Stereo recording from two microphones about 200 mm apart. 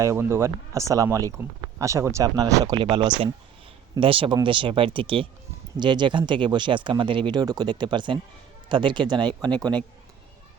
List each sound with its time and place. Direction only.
0.0 s speech: 15° right (ahead or behind)